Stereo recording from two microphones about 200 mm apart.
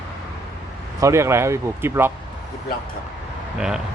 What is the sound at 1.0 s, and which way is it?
Speech, 15° right (ahead or behind).